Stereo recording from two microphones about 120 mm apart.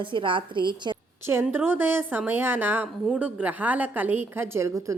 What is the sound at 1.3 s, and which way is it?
A woman's voice, 20° right (ahead or behind).